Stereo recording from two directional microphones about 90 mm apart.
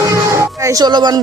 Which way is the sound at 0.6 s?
45° right (ahead or behind).